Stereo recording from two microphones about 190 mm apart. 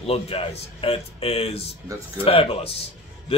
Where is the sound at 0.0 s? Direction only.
30° left (ahead or behind).